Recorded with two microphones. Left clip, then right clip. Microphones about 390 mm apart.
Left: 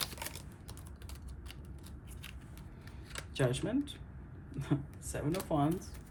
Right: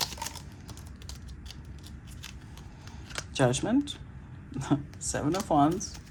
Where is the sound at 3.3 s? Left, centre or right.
Centre.